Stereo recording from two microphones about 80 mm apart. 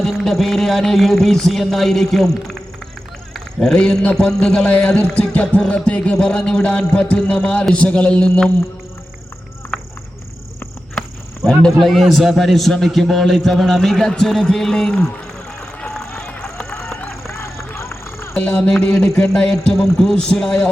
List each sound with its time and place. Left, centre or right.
0.0 s a man's voice: centre
3.3 s music: centre
11.8 s a man's voice: centre
16.0 s music: centre
17.3 s vehicle: left
18.3 s music: centre